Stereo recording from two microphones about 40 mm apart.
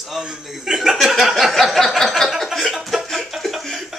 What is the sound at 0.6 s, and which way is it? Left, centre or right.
Speech, centre.